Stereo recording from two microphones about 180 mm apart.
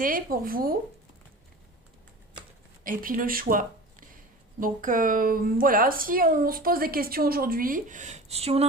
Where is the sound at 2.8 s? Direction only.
50° right (ahead or behind); by 8.6 s 35° right (ahead or behind).